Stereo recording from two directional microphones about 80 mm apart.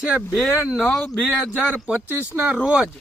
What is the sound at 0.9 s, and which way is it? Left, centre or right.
Speech, centre.